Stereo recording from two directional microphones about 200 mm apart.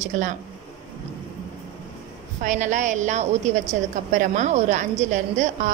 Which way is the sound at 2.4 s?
40° right (ahead or behind).